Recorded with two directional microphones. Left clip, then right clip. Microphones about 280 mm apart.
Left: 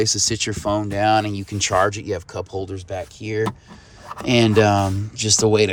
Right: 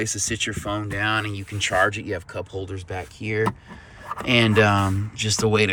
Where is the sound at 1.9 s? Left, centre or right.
Left.